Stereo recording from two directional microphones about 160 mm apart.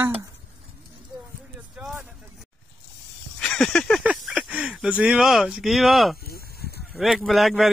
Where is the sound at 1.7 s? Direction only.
5° right (ahead or behind).